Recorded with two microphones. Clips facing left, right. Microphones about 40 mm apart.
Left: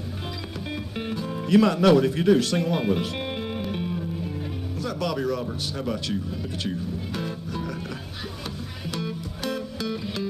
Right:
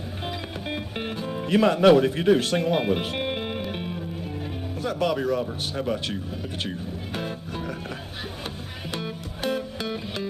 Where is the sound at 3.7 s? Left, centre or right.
Right.